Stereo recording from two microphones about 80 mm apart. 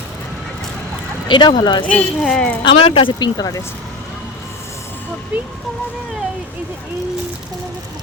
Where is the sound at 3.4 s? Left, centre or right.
Left.